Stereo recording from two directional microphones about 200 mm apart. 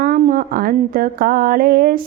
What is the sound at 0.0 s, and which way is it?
Mantra, 45° right (ahead or behind).